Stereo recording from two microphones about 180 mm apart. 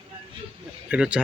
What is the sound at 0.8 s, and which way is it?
Speech, 5° right (ahead or behind).